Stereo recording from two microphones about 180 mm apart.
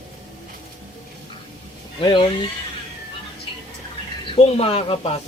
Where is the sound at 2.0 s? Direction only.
25° left (ahead or behind).